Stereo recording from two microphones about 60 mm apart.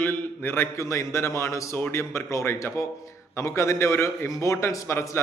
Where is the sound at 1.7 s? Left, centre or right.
Left.